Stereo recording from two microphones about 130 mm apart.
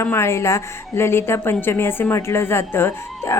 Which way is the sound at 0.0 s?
20° left (ahead or behind).